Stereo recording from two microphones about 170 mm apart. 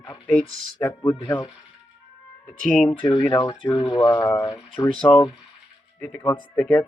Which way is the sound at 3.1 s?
25° left (ahead or behind).